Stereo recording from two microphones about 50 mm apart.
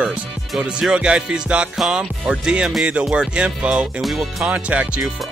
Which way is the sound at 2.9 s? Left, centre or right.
Right.